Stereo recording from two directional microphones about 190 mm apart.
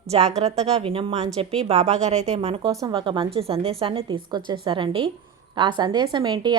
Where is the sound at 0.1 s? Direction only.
35° right (ahead or behind).